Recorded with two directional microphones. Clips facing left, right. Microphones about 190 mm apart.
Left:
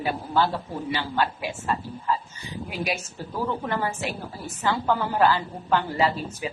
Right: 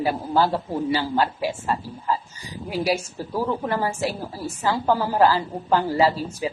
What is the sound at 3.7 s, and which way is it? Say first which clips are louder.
A woman's voice: right 3 dB; 35° right (ahead or behind).